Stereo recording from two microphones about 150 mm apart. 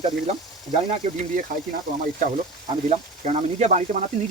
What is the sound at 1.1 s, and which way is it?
Speech, 55° right (ahead or behind).